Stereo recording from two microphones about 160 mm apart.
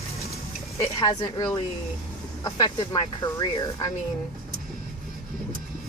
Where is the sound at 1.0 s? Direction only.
25° left (ahead or behind).